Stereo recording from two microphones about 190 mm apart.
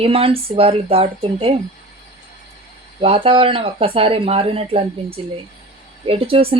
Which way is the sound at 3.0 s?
30° right (ahead or behind).